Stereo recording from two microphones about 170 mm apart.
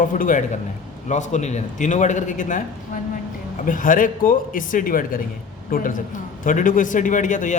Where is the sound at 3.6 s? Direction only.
50° left (ahead or behind).